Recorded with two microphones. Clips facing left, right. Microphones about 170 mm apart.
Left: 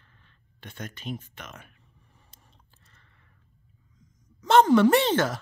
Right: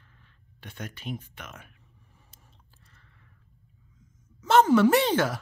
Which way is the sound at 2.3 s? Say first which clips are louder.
Even; 5° right (ahead or behind).